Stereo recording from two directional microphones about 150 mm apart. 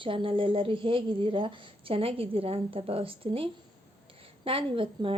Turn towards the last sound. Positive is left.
turn(degrees=-35)  # may be behind; listen again after turning